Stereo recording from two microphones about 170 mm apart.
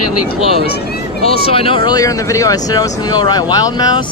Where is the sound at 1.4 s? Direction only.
35° left (ahead or behind).